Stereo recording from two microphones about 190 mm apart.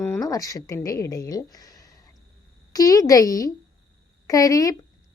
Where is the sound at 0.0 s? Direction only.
15° left (ahead or behind).